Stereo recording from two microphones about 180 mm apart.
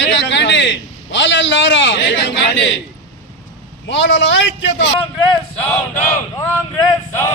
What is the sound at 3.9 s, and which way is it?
A man's voice, 85° left.